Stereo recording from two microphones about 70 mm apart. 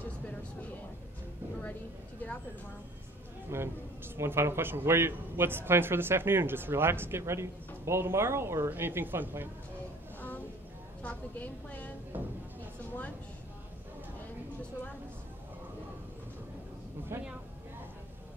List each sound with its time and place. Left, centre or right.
3.4 s speech: right
11.0 s a woman's voice: left
12.1 s speech: right
17.1 s speech: right